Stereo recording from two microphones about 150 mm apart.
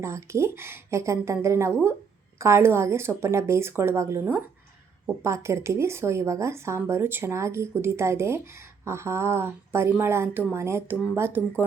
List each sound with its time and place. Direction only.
0.0 s a woman's voice: 20° right (ahead or behind)